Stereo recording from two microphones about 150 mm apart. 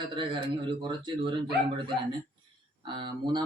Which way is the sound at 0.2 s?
35° right (ahead or behind).